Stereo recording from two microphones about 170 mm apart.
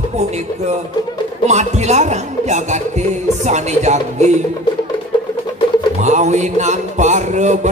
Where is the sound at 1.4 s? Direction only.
40° right (ahead or behind).